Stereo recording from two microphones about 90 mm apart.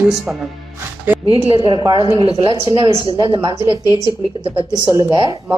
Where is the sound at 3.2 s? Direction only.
70° right (ahead or behind).